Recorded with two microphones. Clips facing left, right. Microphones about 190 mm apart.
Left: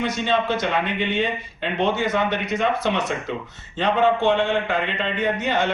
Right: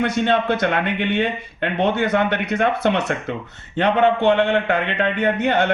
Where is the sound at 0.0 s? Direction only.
60° right (ahead or behind).